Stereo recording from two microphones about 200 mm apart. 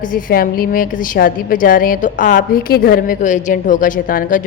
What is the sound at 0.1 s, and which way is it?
A woman's voice, 45° left (ahead or behind).